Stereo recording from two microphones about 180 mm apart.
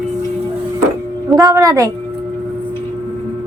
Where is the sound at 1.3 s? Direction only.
20° right (ahead or behind).